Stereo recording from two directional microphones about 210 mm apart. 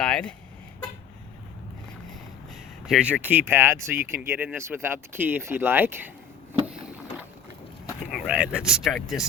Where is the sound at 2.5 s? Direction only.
Centre (ahead or behind).